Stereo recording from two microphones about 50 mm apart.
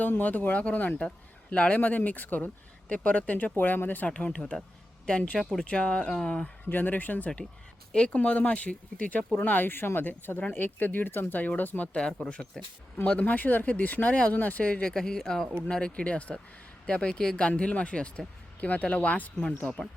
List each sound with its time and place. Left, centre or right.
0.0 s speech: left
4.1 s speech: left
5.4 s speech: centre
5.6 s speech: left
6.1 s speech: centre
6.7 s speech: left
7.9 s speech: left
11.9 s speech: centre
13.1 s speech: left
14.9 s speech: centre
15.6 s speech: left